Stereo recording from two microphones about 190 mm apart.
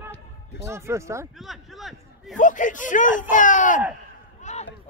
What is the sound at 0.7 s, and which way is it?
Speech, 15° right (ahead or behind).